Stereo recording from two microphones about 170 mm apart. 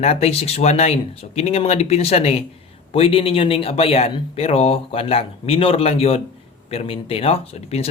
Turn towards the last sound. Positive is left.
turn(degrees=40)  # may be behind; listen again after turning